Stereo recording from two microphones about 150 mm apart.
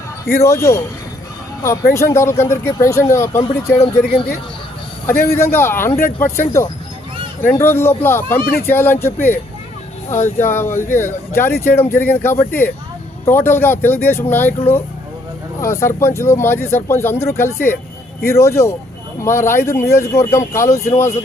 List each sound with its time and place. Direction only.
0.3 s speech: 20° left (ahead or behind)
5.0 s speech: 15° left (ahead or behind)
7.4 s speech: 15° left (ahead or behind)
15.6 s speech: 20° left (ahead or behind)